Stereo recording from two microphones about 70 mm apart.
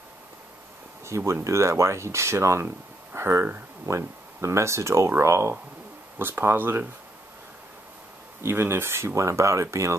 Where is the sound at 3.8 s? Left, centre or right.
Right.